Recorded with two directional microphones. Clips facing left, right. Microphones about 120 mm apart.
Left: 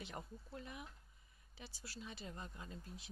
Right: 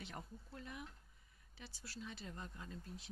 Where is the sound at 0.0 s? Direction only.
10° left (ahead or behind).